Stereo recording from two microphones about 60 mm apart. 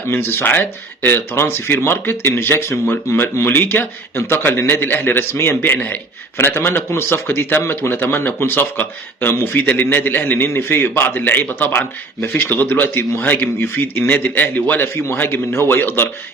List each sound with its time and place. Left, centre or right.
0.1 s a man's voice: left